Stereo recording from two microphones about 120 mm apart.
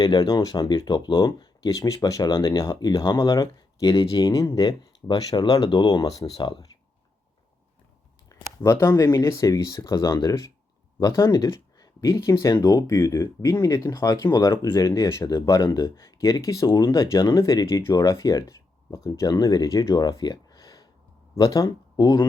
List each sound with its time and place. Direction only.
0.0 s speech: 35° left (ahead or behind)
8.3 s a sound: 25° left (ahead or behind)
8.9 s speech: 35° left (ahead or behind)